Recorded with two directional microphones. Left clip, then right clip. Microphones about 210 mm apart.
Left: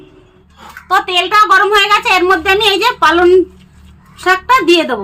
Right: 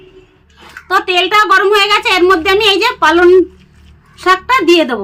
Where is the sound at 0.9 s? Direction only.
35° right (ahead or behind).